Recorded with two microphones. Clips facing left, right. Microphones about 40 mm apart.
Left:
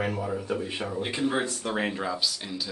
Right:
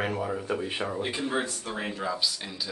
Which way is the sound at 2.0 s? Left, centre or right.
Centre.